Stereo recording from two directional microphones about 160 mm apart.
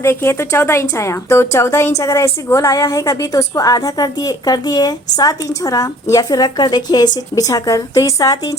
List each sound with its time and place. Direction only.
0.0 s a woman's voice: 15° left (ahead or behind)